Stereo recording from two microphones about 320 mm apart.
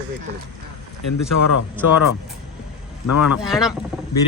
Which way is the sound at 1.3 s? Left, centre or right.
Left.